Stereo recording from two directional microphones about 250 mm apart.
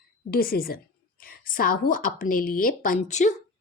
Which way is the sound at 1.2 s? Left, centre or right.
Left.